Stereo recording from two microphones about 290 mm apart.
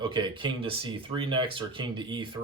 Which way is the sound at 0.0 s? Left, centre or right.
Centre.